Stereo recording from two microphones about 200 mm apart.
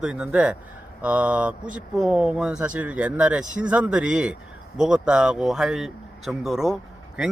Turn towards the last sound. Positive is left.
turn(degrees=0)  # may be behind; listen again after turning